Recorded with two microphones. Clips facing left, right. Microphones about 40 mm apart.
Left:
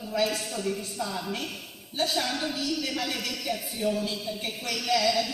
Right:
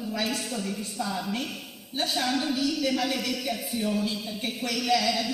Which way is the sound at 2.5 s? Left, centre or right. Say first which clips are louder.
Right 4 dB; right.